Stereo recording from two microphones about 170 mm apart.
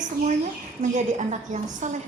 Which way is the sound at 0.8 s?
45° right (ahead or behind).